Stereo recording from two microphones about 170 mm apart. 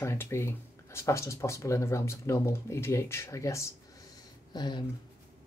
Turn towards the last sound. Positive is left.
turn(degrees=25)  # may be behind; listen again after turning